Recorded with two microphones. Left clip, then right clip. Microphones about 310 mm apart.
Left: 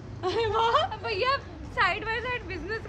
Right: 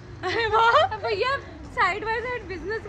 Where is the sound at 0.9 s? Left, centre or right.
Right.